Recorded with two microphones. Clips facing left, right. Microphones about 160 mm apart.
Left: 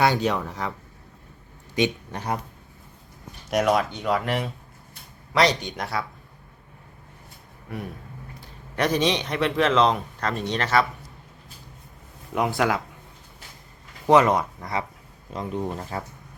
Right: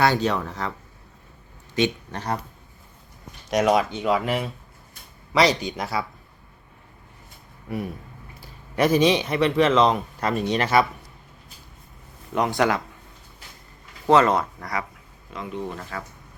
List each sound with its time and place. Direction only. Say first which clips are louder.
0.0 s speech: right 1 dB; 15° left (ahead or behind)
1.7 s speech: right 1 dB; 10° left (ahead or behind)
3.5 s speech: right 2 dB; centre (ahead or behind)
8.4 s a man's voice: right 4 dB; 5° right (ahead or behind)
12.3 s speech: right 1 dB; 5° left (ahead or behind)
14.1 s speech: even; 15° left (ahead or behind)
15.3 s speech: left 2 dB; 40° left (ahead or behind)